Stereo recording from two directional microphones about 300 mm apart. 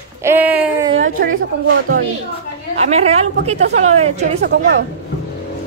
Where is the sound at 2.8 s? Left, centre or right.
Right.